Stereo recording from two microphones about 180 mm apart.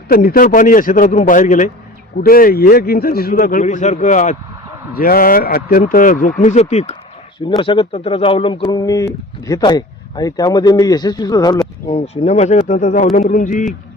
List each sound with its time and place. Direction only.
0.1 s a man's voice: 55° left (ahead or behind); by 6.9 s 35° left (ahead or behind)
7.3 s speech: 25° left (ahead or behind)
11.9 s a man's voice: 35° left (ahead or behind)